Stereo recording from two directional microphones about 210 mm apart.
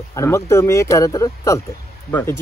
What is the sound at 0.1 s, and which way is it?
Speech, 15° left (ahead or behind).